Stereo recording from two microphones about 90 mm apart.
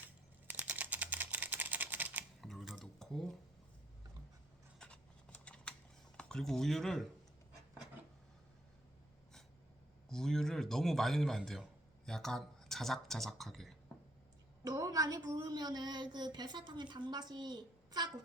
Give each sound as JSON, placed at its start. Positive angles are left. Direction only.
{"t": 0.4, "sound": "typing", "side_deg": -20}
{"t": 2.4, "sound": "a sound", "side_deg": 0}
{"t": 4.8, "sound": "a sound", "side_deg": 10}
{"t": 6.1, "sound": "speech", "side_deg": 5}
{"t": 10.1, "sound": "speech", "side_deg": 5}
{"t": 14.6, "sound": "a woman's voice", "side_deg": -40}